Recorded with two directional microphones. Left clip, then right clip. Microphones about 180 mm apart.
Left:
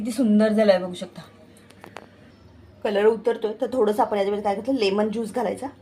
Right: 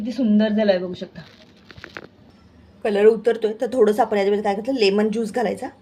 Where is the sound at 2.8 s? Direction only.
25° right (ahead or behind).